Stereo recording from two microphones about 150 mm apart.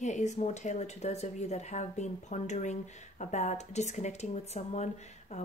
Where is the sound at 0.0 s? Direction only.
50° left (ahead or behind).